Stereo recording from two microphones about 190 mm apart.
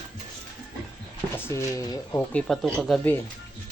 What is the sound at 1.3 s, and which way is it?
Speech, 15° left (ahead or behind).